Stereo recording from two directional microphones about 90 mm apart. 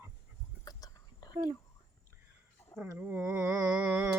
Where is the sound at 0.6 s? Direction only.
45° left (ahead or behind).